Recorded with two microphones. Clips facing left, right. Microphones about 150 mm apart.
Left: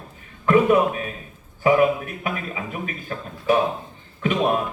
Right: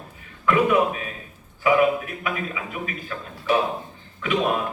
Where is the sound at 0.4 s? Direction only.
40° left (ahead or behind).